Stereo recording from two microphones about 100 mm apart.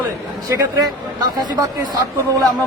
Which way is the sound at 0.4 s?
35° right (ahead or behind).